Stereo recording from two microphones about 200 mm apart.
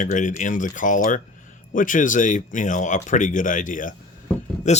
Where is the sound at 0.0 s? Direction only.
40° left (ahead or behind).